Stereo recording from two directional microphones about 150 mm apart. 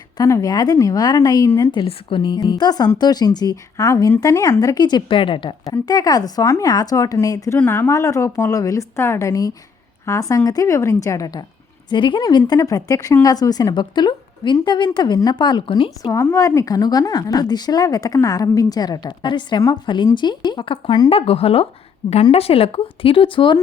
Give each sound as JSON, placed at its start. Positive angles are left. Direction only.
{"t": 0.2, "sound": "speech", "side_deg": 20}
{"t": 16.1, "sound": "speech", "side_deg": 20}